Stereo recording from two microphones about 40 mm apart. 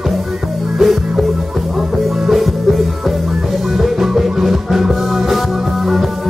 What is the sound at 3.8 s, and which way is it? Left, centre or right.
Music, centre.